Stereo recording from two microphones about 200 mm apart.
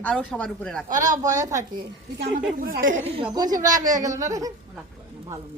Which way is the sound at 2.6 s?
45° right (ahead or behind).